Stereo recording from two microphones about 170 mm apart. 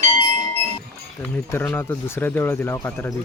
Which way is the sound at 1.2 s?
10° left (ahead or behind).